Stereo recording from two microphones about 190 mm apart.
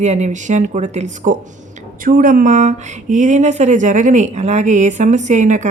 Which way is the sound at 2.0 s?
45° right (ahead or behind).